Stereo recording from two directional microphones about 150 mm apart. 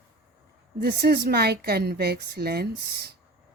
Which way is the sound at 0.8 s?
80° right.